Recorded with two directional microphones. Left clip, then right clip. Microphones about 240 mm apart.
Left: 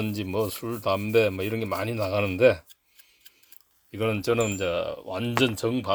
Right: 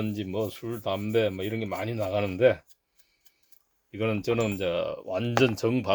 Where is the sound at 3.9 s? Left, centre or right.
Left.